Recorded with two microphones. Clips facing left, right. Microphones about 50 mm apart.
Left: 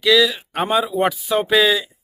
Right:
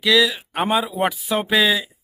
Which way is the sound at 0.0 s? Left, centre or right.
Centre.